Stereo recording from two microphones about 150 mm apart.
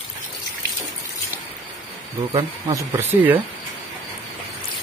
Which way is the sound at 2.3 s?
25° right (ahead or behind).